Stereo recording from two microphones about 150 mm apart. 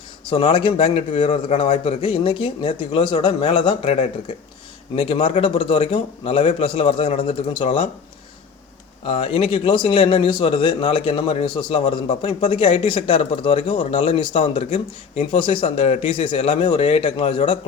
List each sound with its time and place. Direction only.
0.3 s a man's voice: 35° left (ahead or behind)
9.0 s a man's voice: 40° left (ahead or behind)